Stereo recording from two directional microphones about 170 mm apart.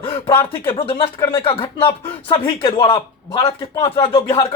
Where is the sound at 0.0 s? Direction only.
30° left (ahead or behind).